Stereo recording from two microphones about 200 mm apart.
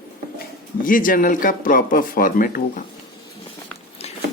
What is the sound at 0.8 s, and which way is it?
Speech, 45° left (ahead or behind).